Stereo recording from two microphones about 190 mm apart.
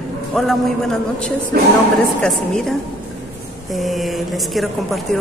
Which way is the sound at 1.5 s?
55° right (ahead or behind).